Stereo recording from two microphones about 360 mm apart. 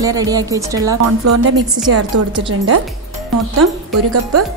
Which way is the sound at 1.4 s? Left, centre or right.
Right.